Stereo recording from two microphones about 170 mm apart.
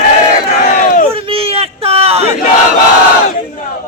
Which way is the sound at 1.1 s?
35° right (ahead or behind).